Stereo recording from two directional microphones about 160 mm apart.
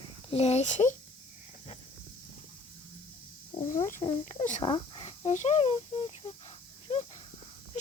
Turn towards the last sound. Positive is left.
turn(degrees=40)  # may be behind; listen again after turning